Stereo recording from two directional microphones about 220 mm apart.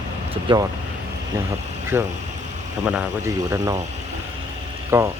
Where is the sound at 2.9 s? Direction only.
10° right (ahead or behind).